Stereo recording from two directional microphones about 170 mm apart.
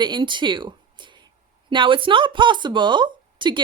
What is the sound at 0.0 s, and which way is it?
A woman's voice, 25° right (ahead or behind).